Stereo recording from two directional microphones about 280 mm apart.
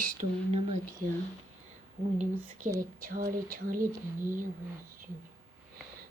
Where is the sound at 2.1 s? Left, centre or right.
Right.